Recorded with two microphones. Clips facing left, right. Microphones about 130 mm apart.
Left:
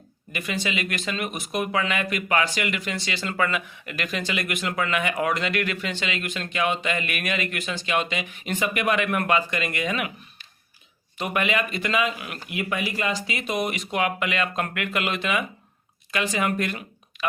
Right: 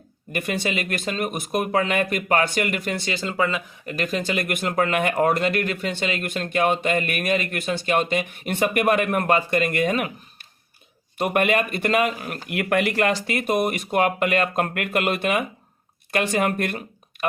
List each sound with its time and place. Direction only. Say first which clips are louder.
0.3 s speech: right 3 dB; 50° right (ahead or behind)
3.2 s speech: right 1 dB; 25° right (ahead or behind)
3.7 s speech: right 5 dB; 40° right (ahead or behind)
11.2 s speech: right 4 dB; 50° right (ahead or behind)
12.5 s speech: right 6 dB; 60° right (ahead or behind)